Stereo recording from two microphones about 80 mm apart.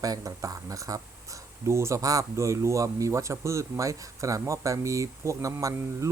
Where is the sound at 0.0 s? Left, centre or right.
Right.